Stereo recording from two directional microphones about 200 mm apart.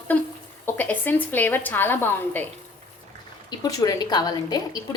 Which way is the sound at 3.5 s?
20° left (ahead or behind).